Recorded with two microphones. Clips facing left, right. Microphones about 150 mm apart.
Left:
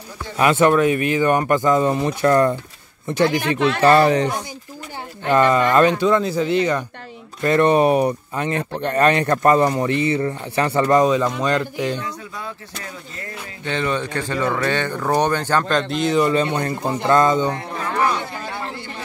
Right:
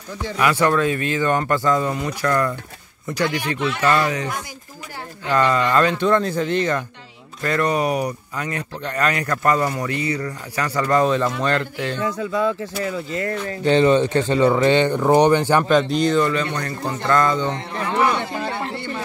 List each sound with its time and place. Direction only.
0.4 s speech: 20° left (ahead or behind)
5.3 s speech: 20° left (ahead or behind)
5.9 s speech: 10° left (ahead or behind)
7.4 s speech: 25° left (ahead or behind)
11.1 s speech: 15° left (ahead or behind)
12.2 s speech: 90° right
13.5 s speech: 30° right (ahead or behind); by 16.2 s centre (ahead or behind)
16.2 s speech: 20° left (ahead or behind)